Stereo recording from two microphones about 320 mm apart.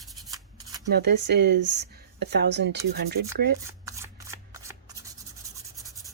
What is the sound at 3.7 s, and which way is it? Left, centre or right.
Shuffling cards, centre.